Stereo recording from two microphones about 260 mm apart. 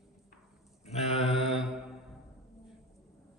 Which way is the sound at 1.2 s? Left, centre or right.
Centre.